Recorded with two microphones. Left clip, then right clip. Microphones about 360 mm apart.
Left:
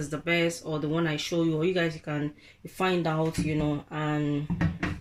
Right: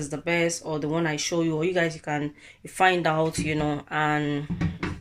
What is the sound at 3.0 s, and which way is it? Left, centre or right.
Speech, right.